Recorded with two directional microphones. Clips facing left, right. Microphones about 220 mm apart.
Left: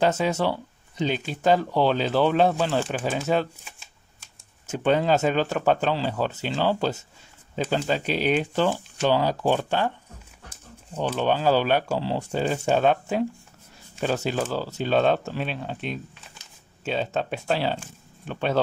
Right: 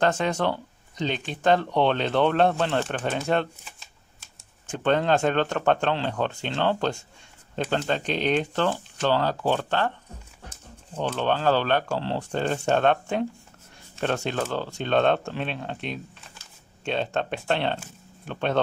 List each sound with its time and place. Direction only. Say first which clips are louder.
0.0 s speech: left 1 dB; 5° left (ahead or behind)
4.6 s speech: left 1 dB; 5° left (ahead or behind)
11.0 s speech: left 2 dB; 10° left (ahead or behind)